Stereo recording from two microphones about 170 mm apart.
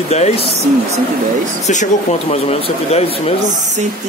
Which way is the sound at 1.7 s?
45° left (ahead or behind).